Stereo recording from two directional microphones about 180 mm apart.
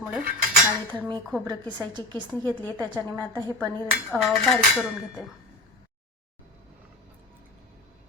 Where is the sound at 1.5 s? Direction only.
25° right (ahead or behind).